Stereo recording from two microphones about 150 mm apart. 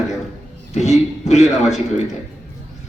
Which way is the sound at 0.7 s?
50° left (ahead or behind).